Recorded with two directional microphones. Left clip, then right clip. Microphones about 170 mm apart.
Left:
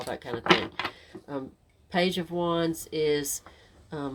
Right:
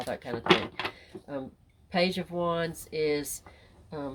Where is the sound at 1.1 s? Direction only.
20° left (ahead or behind).